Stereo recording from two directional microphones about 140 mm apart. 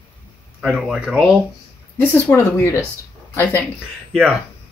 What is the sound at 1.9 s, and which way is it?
Speech, 15° left (ahead or behind).